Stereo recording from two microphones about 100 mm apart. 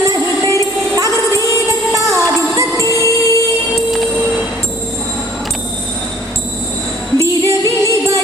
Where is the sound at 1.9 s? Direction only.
30° right (ahead or behind).